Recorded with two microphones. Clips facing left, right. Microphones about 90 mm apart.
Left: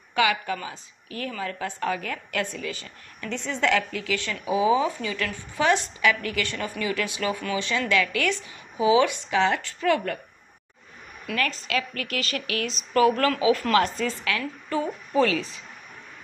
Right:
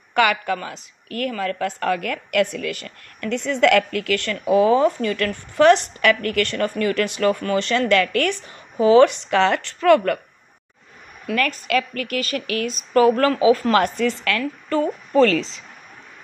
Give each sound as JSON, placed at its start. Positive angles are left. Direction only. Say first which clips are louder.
{"t": 0.1, "sound": "a woman's voice", "louder": "right 5 dB", "side_deg": -60}
{"t": 11.3, "sound": "a woman's voice", "louder": "right 6 dB", "side_deg": -50}
{"t": 13.8, "sound": "a woman's voice", "louder": "right 6 dB", "side_deg": -60}